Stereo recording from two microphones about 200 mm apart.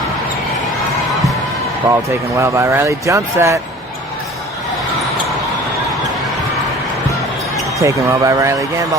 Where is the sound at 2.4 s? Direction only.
15° right (ahead or behind).